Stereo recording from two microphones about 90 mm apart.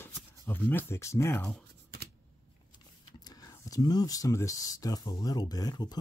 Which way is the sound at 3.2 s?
45° left (ahead or behind).